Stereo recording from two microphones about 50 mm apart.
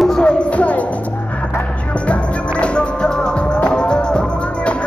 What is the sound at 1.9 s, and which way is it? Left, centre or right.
Music, left.